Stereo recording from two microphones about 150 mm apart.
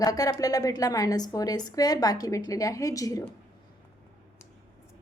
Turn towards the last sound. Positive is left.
turn(degrees=25)  # may be behind; listen again after turning